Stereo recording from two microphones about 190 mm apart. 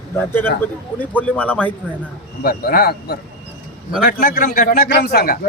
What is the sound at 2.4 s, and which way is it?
A man's voice, 50° left (ahead or behind).